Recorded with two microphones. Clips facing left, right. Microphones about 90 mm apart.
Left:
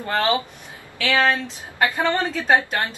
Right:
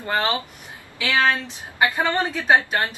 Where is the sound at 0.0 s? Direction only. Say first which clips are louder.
Left 1 dB; 20° right (ahead or behind).